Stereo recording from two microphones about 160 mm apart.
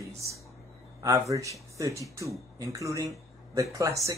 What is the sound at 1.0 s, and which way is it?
Speech, 20° right (ahead or behind).